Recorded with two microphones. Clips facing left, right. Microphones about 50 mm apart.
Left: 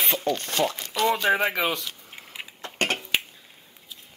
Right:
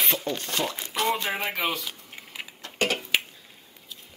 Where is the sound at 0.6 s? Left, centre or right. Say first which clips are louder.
Left 3 dB; centre.